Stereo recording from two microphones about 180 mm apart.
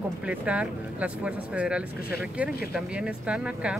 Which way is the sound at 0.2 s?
5° right (ahead or behind).